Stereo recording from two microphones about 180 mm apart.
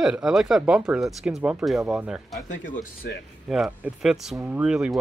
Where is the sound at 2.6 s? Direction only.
45° left (ahead or behind).